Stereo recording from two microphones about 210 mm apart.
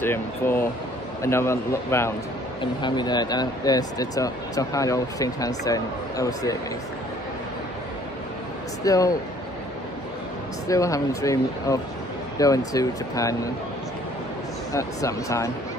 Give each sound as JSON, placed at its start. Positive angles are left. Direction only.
{"t": 0.0, "sound": "speech", "side_deg": 10}
{"t": 8.8, "sound": "speech", "side_deg": 15}
{"t": 10.7, "sound": "speech", "side_deg": 15}
{"t": 14.7, "sound": "speech", "side_deg": 15}